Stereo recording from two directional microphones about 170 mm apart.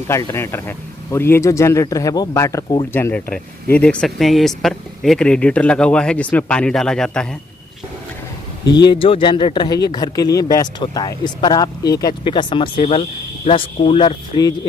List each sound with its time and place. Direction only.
0.1 s speech: 15° left (ahead or behind)
2.9 s speech: 10° left (ahead or behind)
8.8 s speech: 30° left (ahead or behind)
12.7 s speech: 40° left (ahead or behind)